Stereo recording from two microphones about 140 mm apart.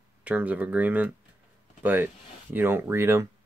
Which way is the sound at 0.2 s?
10° right (ahead or behind).